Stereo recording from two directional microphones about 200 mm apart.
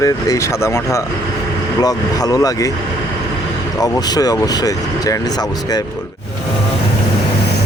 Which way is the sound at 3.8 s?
20° left (ahead or behind).